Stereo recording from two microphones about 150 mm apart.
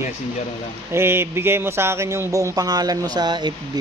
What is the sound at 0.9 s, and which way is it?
Speech, 15° right (ahead or behind).